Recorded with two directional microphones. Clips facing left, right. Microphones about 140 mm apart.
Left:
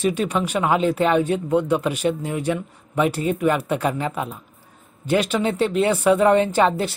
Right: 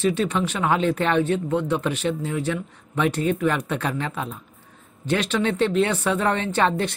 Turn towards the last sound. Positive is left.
turn(degrees=10)  # may be behind; listen again after turning